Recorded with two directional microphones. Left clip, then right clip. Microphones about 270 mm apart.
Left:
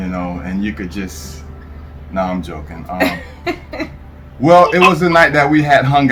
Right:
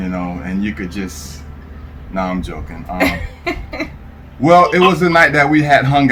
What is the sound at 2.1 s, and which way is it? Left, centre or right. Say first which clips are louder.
Speech: left 1 dB; centre.